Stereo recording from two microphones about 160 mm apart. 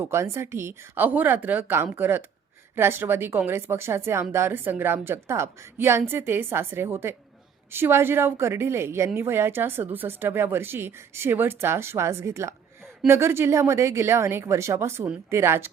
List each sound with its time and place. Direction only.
0.0 s a woman's voice: 15° right (ahead or behind)